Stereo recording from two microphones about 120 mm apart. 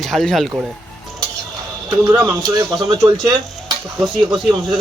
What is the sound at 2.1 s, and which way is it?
Speech, 25° right (ahead or behind).